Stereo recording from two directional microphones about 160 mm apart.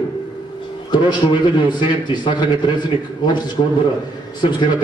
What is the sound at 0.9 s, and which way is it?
A man's voice, 30° left (ahead or behind).